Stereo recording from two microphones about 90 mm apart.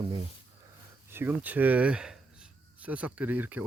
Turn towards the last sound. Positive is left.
turn(degrees=-20)  # may be behind; listen again after turning